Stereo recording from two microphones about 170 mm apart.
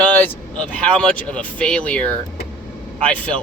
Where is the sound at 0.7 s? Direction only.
5° left (ahead or behind).